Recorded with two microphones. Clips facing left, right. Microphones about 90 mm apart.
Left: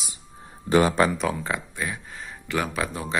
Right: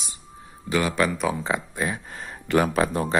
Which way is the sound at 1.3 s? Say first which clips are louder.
Right 3 dB; 15° right (ahead or behind).